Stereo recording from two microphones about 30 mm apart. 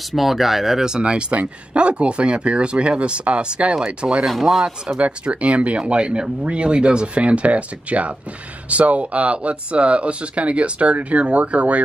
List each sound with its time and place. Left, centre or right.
0.1 s speech: centre
1.0 s speech: right
1.4 s speech: right
4.3 s speech: centre
5.0 s speech: right
7.4 s speech: right